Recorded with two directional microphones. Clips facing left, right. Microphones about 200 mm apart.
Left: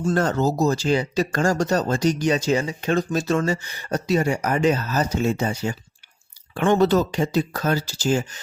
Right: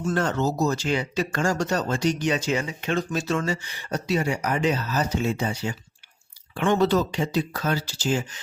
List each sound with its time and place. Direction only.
0.0 s speech: 40° left (ahead or behind)